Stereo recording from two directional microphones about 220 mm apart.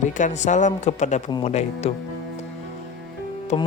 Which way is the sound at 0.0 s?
35° left (ahead or behind).